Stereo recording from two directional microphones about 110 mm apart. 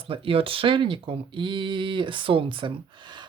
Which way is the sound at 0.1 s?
55° right (ahead or behind).